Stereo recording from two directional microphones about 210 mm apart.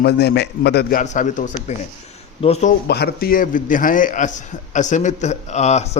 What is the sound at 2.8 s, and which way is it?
A man's voice, 50° left (ahead or behind).